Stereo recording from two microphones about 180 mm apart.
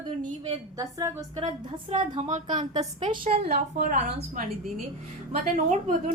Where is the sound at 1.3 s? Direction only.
30° right (ahead or behind).